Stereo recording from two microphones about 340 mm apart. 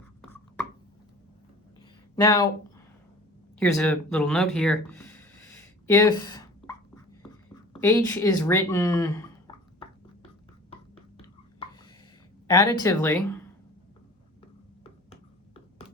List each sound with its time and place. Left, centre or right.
2.1 s speech: centre
3.6 s a sound: centre
7.7 s speech: centre
12.5 s speech: centre
14.8 s finger snapping: centre